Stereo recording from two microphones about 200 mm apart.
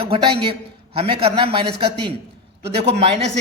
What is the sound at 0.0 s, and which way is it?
A man's voice, 25° right (ahead or behind).